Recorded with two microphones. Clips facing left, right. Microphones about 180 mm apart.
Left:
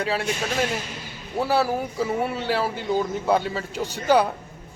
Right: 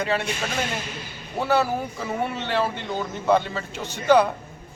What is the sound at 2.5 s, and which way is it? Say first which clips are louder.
A man's voice: left 2 dB; 5° left (ahead or behind).